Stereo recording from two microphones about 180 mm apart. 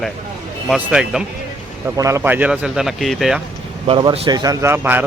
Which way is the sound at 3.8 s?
30° right (ahead or behind).